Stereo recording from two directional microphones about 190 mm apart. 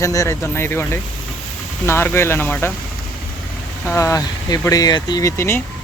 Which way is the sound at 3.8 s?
15° left (ahead or behind).